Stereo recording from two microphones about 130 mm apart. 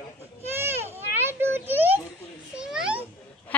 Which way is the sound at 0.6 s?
15° right (ahead or behind).